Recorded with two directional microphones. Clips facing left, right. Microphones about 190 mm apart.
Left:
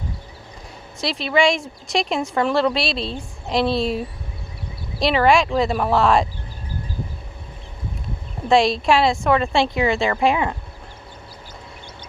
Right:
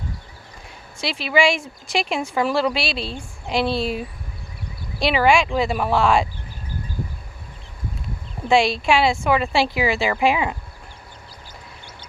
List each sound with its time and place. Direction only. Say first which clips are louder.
1.0 s a woman's voice: left 1 dB; centre (ahead or behind)
8.4 s a woman's voice: left 1 dB; centre (ahead or behind)